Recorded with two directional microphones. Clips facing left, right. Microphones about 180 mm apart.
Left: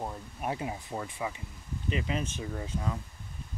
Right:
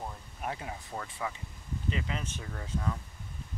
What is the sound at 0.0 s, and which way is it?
Speech, 20° left (ahead or behind).